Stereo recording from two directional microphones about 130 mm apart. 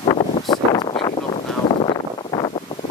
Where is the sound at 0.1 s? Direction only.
35° left (ahead or behind).